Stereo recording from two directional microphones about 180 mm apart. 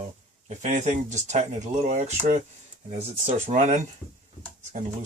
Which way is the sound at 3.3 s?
40° right (ahead or behind).